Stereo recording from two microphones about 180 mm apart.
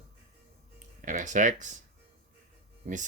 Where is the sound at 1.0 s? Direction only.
45° right (ahead or behind).